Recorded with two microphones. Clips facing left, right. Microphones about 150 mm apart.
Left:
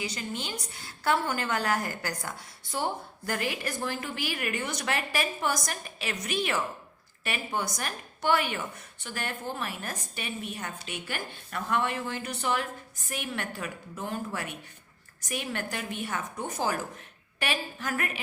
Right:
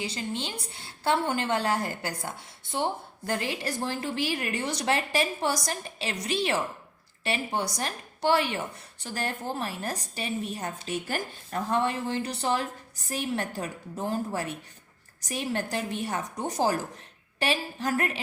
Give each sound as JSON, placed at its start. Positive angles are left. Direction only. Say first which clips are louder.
{"t": 0.0, "sound": "a woman's voice", "louder": "right 2 dB", "side_deg": -30}